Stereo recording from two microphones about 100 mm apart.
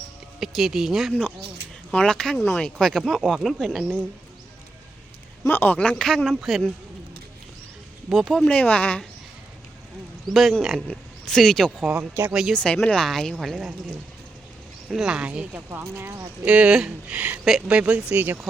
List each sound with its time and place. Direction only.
0.3 s speech: 5° right (ahead or behind)
1.9 s speech: 10° left (ahead or behind)
5.5 s speech: 20° left (ahead or behind); by 6.7 s centre (ahead or behind)
8.3 s speech: 10° left (ahead or behind)
10.2 s speech: centre (ahead or behind)
11.8 s speech: 10° right (ahead or behind)
12.3 s speech: 5° right (ahead or behind)
12.5 s speech: 10° left (ahead or behind)
14.8 s speech: 5° right (ahead or behind)
15.7 s speech: 20° right (ahead or behind)
16.4 s speech: 10° right (ahead or behind)